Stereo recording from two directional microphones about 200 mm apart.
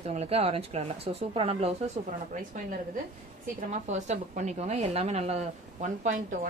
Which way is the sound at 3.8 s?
35° right (ahead or behind).